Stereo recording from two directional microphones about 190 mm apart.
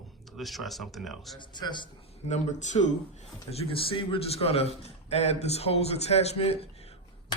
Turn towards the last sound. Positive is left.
turn(degrees=30)  # may be behind; listen again after turning